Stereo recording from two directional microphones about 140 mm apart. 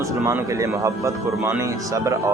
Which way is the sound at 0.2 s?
20° right (ahead or behind).